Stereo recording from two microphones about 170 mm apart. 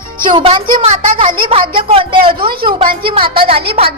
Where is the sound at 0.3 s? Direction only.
30° right (ahead or behind).